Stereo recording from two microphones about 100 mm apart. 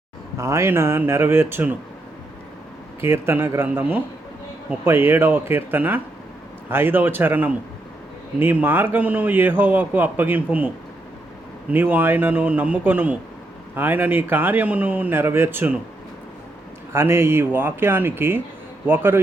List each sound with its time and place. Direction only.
0.3 s a man's voice: 30° right (ahead or behind)
3.0 s a man's voice: 25° right (ahead or behind)
11.7 s a man's voice: 20° right (ahead or behind)
16.9 s a man's voice: 25° right (ahead or behind)